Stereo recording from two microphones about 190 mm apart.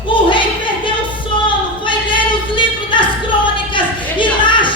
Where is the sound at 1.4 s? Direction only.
25° left (ahead or behind).